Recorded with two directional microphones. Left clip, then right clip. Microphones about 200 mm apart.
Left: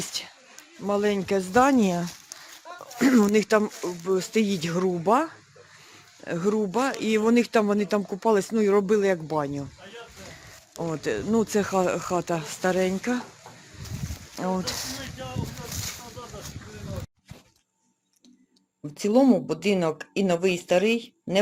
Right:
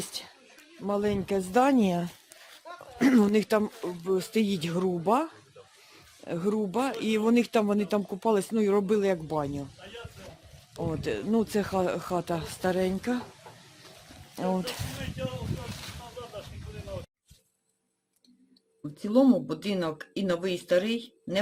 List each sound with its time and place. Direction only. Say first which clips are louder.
0.0 s a sound: left 5 dB; 10° left (ahead or behind)
0.9 s speech: left 4 dB; 15° left (ahead or behind); by 2.0 s centre (ahead or behind)
2.7 s a sound: left 2 dB; 15° left (ahead or behind)
3.0 s speech: left 3 dB; 5° right (ahead or behind)
10.8 s speech: left 3 dB; centre (ahead or behind)
14.3 s speech: left 1 dB; 5° right (ahead or behind)
18.9 s speech: left 3 dB; 15° left (ahead or behind)